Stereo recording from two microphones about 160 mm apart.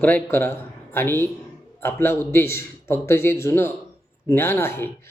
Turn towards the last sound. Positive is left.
turn(degrees=15)  # may be behind; listen again after turning